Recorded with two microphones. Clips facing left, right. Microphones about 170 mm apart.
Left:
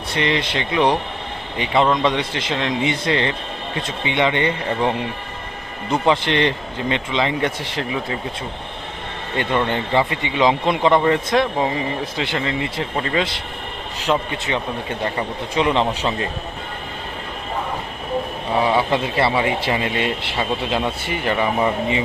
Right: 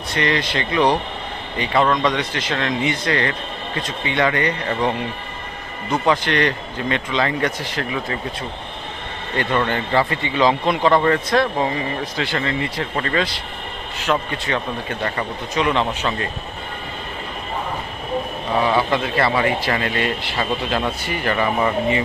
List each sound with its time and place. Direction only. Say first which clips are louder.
0.1 s a man's voice: even; 25° left (ahead or behind)
5.9 s a man's voice: left 1 dB; 25° left (ahead or behind)
9.4 s a man's voice: even; 20° left (ahead or behind)
18.5 s speech: even; 10° left (ahead or behind)
18.9 s a man's voice: even; 25° left (ahead or behind)